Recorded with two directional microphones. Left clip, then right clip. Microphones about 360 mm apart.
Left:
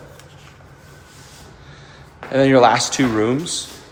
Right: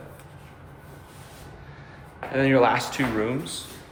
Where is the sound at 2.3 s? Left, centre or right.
Centre.